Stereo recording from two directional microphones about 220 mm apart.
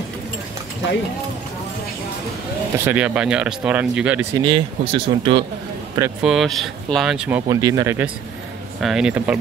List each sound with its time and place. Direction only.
2.8 s speech: 5° right (ahead or behind)
4.4 s speech: 20° right (ahead or behind)
6.2 s speech: centre (ahead or behind)